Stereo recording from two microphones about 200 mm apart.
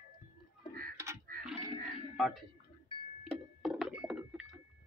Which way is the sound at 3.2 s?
Centre (ahead or behind).